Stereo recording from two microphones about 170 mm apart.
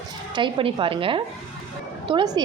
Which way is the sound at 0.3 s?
30° right (ahead or behind).